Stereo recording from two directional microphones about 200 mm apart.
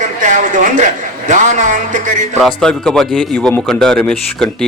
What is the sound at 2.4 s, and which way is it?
A man's voice, 5° left (ahead or behind).